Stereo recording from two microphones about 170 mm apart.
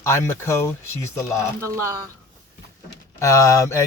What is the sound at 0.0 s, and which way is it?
Speech, 15° left (ahead or behind).